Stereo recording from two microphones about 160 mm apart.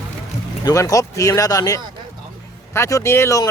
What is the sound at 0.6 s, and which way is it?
Speech, 20° left (ahead or behind).